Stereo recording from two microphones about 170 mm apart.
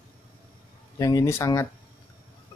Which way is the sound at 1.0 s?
20° left (ahead or behind).